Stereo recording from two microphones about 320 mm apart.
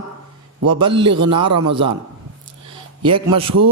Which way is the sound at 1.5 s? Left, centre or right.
Right.